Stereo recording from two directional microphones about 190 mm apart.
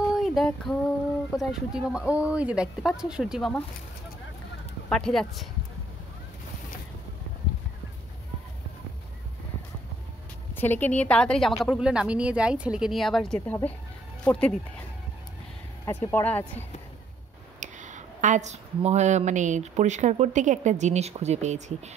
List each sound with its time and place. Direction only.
0.1 s female singing: centre (ahead or behind)
1.3 s speech: centre (ahead or behind)
4.8 s speech: 5° left (ahead or behind)
10.5 s a woman's voice: 10° left (ahead or behind)
15.8 s a woman's voice: 10° left (ahead or behind)
17.6 s speech: 40° right (ahead or behind)